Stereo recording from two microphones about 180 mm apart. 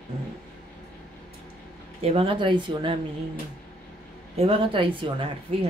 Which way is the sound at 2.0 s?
30° right (ahead or behind).